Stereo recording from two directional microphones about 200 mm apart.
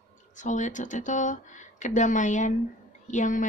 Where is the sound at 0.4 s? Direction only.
40° left (ahead or behind).